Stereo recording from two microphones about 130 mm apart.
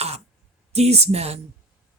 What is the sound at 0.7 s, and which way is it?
Speech, 55° right (ahead or behind).